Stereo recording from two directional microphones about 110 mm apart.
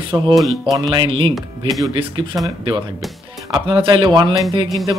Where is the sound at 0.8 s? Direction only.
45° right (ahead or behind).